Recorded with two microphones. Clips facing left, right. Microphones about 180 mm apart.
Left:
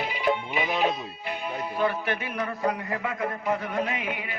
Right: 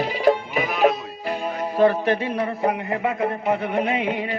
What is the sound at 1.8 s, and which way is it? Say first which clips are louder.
A man's voice: right 10 dB; 35° right (ahead or behind).